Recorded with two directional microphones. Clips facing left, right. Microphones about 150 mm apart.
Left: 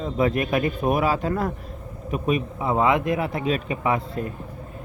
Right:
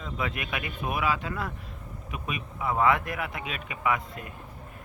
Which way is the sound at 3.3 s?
35° left (ahead or behind).